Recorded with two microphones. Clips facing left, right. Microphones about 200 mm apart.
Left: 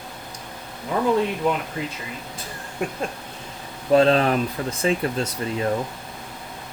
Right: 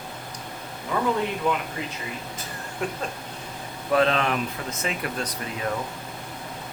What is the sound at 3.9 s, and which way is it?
Speech, 35° left (ahead or behind).